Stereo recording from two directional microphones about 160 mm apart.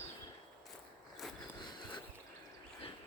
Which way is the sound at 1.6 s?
30° left (ahead or behind).